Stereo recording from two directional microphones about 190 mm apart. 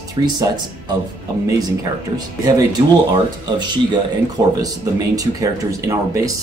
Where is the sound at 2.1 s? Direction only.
20° right (ahead or behind).